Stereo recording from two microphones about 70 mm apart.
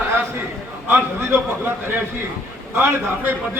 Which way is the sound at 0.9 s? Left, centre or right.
Right.